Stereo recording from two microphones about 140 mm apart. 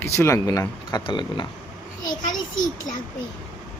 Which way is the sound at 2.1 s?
65° left (ahead or behind).